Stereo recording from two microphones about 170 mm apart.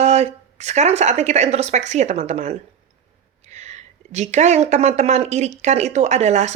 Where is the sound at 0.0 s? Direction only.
40° right (ahead or behind).